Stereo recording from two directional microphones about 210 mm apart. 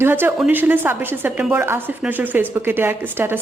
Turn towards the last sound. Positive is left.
turn(degrees=-10)  # may be behind; listen again after turning